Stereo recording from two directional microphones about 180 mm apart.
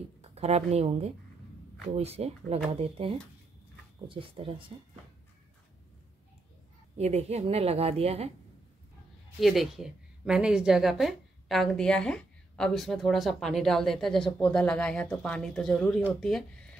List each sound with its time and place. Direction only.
0.2 s a woman's voice: 35° right (ahead or behind)
7.0 s a woman's voice: 35° right (ahead or behind)
9.4 s speech: centre (ahead or behind)